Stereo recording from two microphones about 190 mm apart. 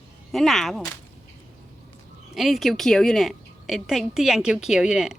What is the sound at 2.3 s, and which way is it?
A woman's voice, centre (ahead or behind).